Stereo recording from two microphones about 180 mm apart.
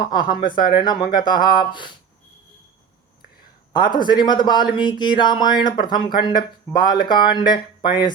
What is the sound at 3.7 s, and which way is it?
A man's voice, 25° left (ahead or behind).